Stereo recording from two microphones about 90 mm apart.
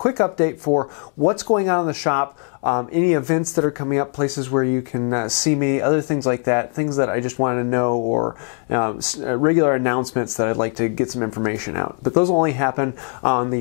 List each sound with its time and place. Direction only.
0.0 s speech: 20° left (ahead or behind)